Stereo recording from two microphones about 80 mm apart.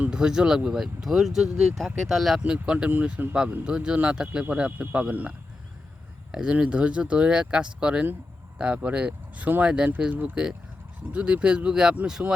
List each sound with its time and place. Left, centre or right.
0.0 s speech: centre
2.4 s speech: centre
6.3 s speech: centre